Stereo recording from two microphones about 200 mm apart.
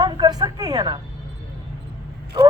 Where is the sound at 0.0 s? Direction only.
20° right (ahead or behind).